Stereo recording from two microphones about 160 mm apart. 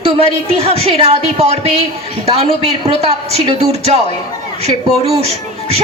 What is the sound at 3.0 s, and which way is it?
Speech, 40° right (ahead or behind).